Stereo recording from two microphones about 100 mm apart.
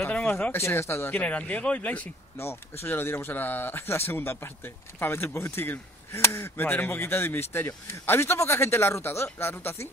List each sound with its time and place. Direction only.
0.0 s speech: 15° left (ahead or behind)